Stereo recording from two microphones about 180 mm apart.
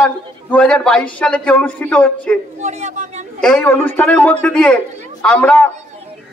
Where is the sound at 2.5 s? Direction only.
40° right (ahead or behind).